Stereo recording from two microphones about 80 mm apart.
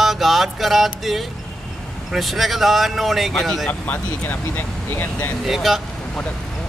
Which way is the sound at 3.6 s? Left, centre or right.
Centre.